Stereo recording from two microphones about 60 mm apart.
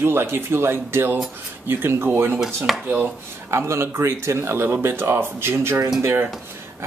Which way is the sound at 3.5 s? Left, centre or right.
Right.